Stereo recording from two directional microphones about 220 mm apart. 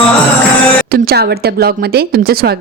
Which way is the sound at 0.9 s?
40° right (ahead or behind).